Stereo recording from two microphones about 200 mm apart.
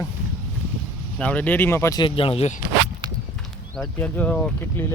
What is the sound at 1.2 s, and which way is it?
Speech, 5° left (ahead or behind).